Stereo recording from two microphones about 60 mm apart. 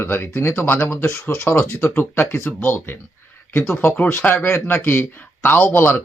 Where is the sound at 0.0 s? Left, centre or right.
Left.